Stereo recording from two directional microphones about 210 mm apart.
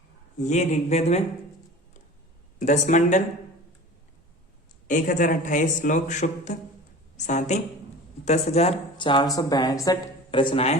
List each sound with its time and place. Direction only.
0.3 s a man's voice: 35° left (ahead or behind)
2.6 s a man's voice: 35° left (ahead or behind)
4.9 s a man's voice: 40° left (ahead or behind)